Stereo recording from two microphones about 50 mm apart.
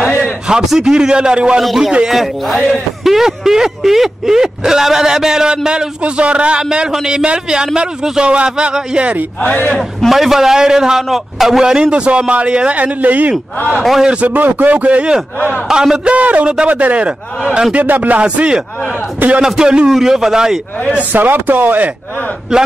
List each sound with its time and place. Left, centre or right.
0.7 s a man's voice: centre
1.6 s a man's voice: centre; by 9.2 s right
9.5 s a man's voice: left
9.8 s a man's voice: centre
11.7 s a man's voice: right
13.7 s a man's voice: centre
14.2 s speech: right
15.7 s a man's voice: centre
16.1 s a man's voice: right
18.2 s a man's voice: right
19.1 s speech: right
19.4 s a man's voice: centre
21.1 s speech: right